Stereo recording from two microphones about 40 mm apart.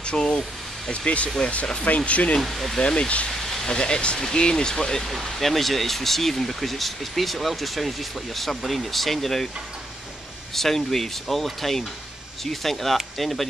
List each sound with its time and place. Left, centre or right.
0.0 s a sound: centre
1.0 s speech: left
2.4 s speech: centre
2.8 s speech: left
3.3 s a sound: centre
3.7 s speech: left
5.2 s speech: centre
10.5 s speech: centre